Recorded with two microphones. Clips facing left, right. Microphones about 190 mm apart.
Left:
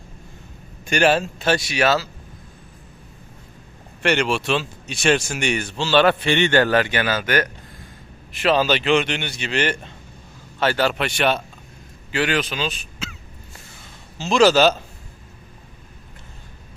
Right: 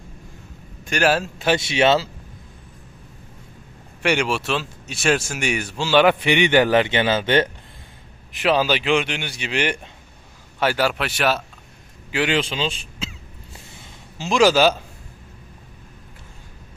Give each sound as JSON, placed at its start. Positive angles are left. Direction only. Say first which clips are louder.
{"t": 0.9, "sound": "speech", "louder": "left 2 dB", "side_deg": -5}
{"t": 1.5, "sound": "speech", "louder": "right 2 dB", "side_deg": -25}
{"t": 4.0, "sound": "speech", "louder": "left 1 dB", "side_deg": -10}
{"t": 8.3, "sound": "speech", "louder": "left 1 dB", "side_deg": -15}
{"t": 12.1, "sound": "speech", "louder": "right 1 dB", "side_deg": -20}
{"t": 14.2, "sound": "speech", "louder": "left 1 dB", "side_deg": -10}